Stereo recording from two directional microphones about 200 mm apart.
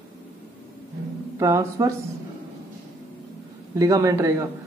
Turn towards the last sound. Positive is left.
turn(degrees=-15)  # may be behind; listen again after turning